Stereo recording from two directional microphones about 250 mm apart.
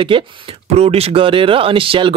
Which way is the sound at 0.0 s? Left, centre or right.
Right.